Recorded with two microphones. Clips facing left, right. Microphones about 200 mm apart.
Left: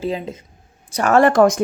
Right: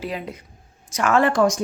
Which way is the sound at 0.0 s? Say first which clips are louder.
Left 5 dB; 25° left (ahead or behind).